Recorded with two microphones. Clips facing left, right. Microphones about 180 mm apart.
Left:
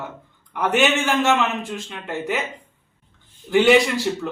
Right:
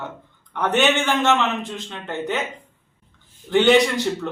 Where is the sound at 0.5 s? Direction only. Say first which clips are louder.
Even; 5° left (ahead or behind).